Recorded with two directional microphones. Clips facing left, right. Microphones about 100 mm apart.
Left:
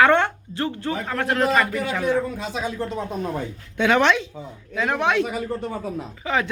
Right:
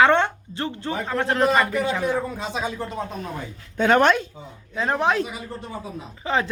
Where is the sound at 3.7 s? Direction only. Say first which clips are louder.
Right 1 dB; 45° right (ahead or behind).